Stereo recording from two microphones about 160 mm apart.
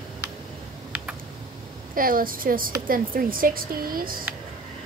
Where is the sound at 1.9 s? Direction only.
60° right (ahead or behind).